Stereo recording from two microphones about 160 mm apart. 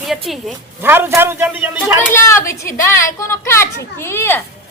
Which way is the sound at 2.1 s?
15° left (ahead or behind).